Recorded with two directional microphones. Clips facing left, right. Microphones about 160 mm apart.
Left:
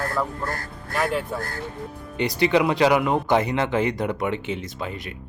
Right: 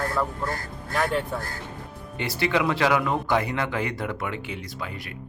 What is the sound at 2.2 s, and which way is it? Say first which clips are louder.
Speech: left 5 dB; 20° left (ahead or behind).